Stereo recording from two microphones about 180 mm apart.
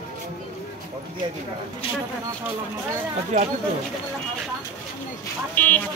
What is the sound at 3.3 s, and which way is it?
Speech, 40° right (ahead or behind).